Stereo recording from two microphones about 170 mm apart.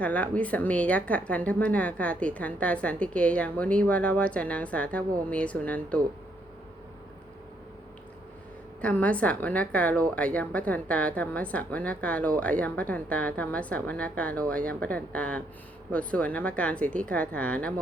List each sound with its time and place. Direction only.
0.0 s a woman's voice: 10° left (ahead or behind)
8.8 s a woman's voice: 10° left (ahead or behind)